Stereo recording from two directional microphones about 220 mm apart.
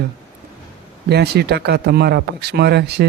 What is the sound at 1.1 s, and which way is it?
Speech, 45° right (ahead or behind).